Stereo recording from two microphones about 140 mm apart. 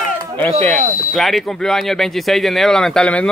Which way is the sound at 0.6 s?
5° left (ahead or behind).